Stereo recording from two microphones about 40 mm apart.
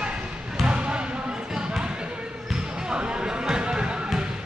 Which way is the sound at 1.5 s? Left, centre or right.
Centre.